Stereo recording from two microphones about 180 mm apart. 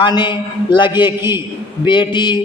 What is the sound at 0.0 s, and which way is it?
A man's voice, 25° left (ahead or behind).